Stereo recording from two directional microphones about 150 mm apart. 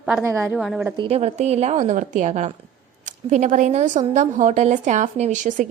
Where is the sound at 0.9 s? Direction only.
40° right (ahead or behind).